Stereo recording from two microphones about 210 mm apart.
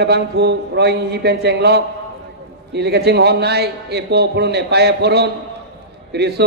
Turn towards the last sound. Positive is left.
turn(degrees=-50)  # may be behind; listen again after turning